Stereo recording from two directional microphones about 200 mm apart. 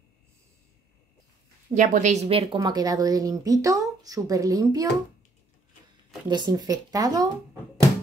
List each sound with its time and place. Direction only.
1.8 s a woman's voice: 35° right (ahead or behind); by 4.8 s 15° right (ahead or behind)
6.2 s speech: 20° right (ahead or behind)